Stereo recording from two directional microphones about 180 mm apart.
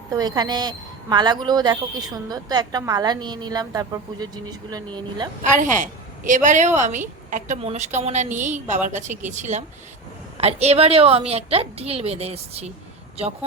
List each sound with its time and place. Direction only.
0.1 s a woman's voice: 20° right (ahead or behind)
5.5 s a woman's voice: 45° right (ahead or behind)